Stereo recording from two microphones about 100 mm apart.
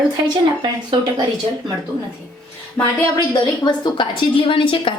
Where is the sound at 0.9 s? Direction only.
50° right (ahead or behind).